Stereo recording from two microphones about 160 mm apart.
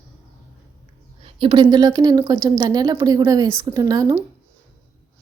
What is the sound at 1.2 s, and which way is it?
Speech, 30° right (ahead or behind).